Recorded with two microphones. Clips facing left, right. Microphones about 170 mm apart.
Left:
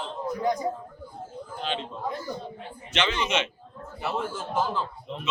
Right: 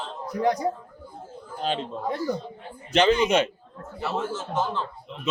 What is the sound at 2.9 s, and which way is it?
Speech, 35° right (ahead or behind).